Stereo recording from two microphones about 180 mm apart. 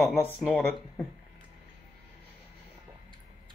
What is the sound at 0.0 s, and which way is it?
Speech, centre (ahead or behind).